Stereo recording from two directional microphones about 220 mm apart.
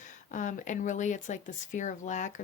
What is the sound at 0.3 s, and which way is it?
Speech, 35° left (ahead or behind).